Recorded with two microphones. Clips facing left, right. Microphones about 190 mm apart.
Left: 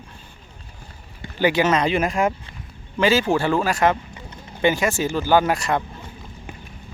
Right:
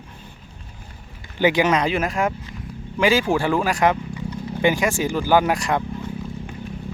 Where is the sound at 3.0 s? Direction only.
10° right (ahead or behind).